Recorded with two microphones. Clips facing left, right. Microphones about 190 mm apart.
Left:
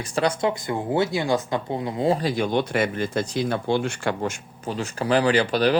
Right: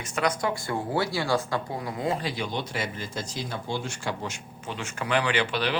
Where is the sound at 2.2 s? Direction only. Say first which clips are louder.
Left 8 dB; 50° left (ahead or behind).